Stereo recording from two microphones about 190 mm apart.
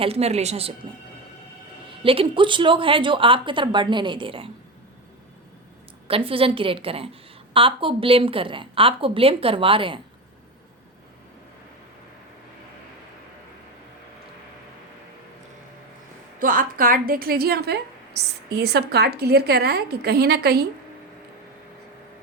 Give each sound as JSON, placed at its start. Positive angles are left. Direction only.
{"t": 0.0, "sound": "a woman's voice", "side_deg": -30}
{"t": 2.0, "sound": "a woman's voice", "side_deg": -30}
{"t": 6.1, "sound": "a woman's voice", "side_deg": -30}
{"t": 16.4, "sound": "a woman's voice", "side_deg": -45}